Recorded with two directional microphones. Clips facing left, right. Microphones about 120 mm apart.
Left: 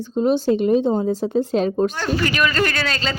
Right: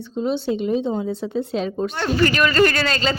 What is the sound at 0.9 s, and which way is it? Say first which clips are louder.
Speech: left 4 dB; 40° left (ahead or behind).